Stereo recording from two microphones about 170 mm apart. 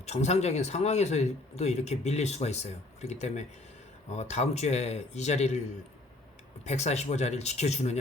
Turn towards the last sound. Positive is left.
turn(degrees=40)  # may be behind; listen again after turning